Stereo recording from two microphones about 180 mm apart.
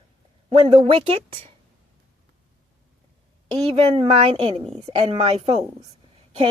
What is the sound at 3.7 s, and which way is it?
A woman's voice, 35° right (ahead or behind).